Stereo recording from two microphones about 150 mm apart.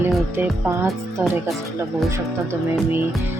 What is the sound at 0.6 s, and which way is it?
Speech, 15° right (ahead or behind).